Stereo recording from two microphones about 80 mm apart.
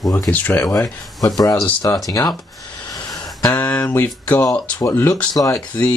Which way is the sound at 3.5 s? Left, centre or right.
Centre.